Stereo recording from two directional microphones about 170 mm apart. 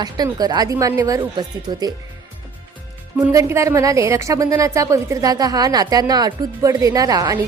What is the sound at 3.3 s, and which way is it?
A woman's voice, 15° right (ahead or behind).